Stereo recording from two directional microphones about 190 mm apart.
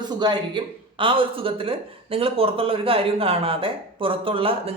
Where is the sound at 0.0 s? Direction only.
25° right (ahead or behind).